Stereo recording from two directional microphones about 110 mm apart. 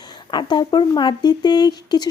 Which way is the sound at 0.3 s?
40° left (ahead or behind).